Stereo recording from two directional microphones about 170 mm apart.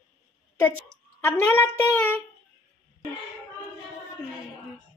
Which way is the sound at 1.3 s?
15° left (ahead or behind).